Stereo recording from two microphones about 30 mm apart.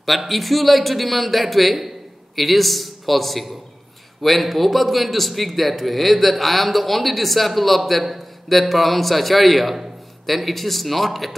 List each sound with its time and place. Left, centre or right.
0.3 s a man's voice: centre